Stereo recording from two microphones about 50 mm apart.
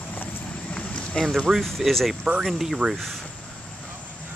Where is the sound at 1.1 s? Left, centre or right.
Centre.